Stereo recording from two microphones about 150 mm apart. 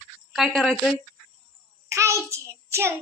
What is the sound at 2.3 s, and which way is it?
Child singing, 20° right (ahead or behind).